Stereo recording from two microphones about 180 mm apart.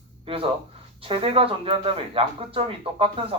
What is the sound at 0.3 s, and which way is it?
Speech, 30° right (ahead or behind).